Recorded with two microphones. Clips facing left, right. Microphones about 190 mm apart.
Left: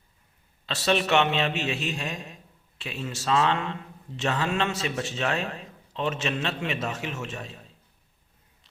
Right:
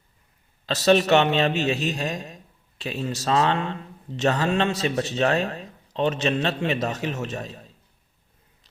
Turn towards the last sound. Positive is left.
turn(degrees=-40)  # may be behind; listen again after turning